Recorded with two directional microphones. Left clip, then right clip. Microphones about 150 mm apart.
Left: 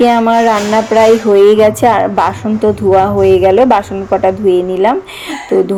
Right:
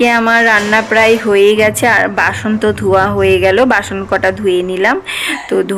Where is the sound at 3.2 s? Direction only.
20° left (ahead or behind).